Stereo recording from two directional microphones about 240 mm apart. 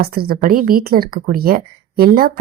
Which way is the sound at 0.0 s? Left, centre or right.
Right.